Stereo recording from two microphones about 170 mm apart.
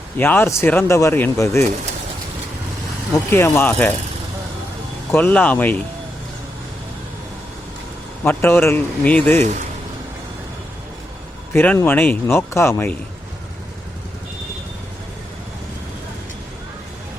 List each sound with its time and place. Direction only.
0.2 s speech: 10° left (ahead or behind)
3.1 s speech: 15° left (ahead or behind)
5.1 s speech: 10° left (ahead or behind)
8.2 s speech: 10° left (ahead or behind)
9.4 s speech: 40° right (ahead or behind)
11.5 s speech: 10° left (ahead or behind)